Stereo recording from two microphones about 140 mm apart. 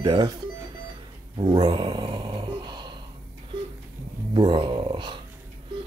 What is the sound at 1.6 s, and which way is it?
Mantra, 30° right (ahead or behind).